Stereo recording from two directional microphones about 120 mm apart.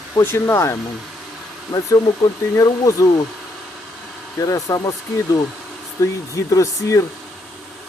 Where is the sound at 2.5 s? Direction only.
25° left (ahead or behind).